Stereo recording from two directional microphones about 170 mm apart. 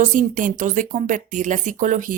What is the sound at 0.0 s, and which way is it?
Speech, 50° right (ahead or behind).